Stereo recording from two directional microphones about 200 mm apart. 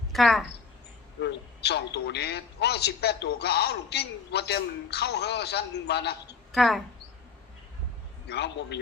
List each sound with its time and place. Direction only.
0.1 s speech: centre (ahead or behind)
1.2 s a man's voice: 60° left (ahead or behind)
6.5 s speech: centre (ahead or behind)
8.3 s a man's voice: 55° left (ahead or behind)